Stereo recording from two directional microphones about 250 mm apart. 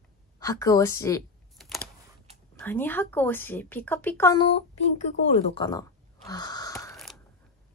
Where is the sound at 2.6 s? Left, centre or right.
Centre.